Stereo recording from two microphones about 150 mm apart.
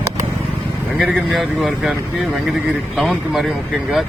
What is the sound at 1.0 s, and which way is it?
Speech, centre (ahead or behind).